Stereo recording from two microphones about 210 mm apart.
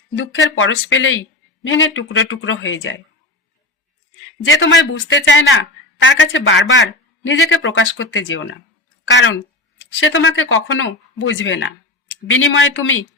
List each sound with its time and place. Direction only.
0.5 s speech: 70° left (ahead or behind)
4.8 s speech: 65° left (ahead or behind)